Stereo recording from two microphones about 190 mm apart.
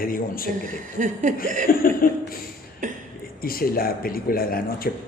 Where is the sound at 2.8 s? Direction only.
45° right (ahead or behind).